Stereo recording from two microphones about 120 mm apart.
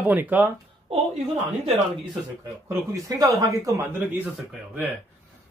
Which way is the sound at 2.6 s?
30° right (ahead or behind).